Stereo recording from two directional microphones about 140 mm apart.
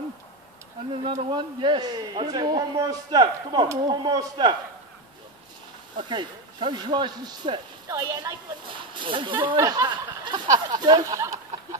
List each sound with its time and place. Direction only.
1.3 s a man's voice: 35° right (ahead or behind)
5.9 s speech: 35° right (ahead or behind)